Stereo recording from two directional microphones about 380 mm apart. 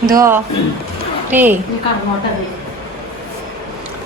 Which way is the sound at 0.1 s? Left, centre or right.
Centre.